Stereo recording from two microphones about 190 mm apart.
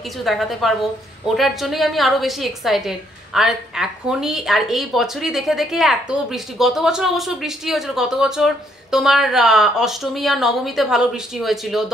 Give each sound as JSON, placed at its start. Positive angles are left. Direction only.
{"t": 0.0, "sound": "a woman's voice", "side_deg": 0}